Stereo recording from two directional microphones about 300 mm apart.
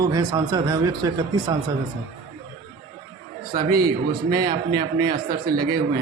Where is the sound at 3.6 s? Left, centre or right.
Right.